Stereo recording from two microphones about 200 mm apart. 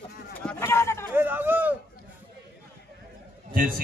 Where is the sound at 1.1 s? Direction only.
10° right (ahead or behind).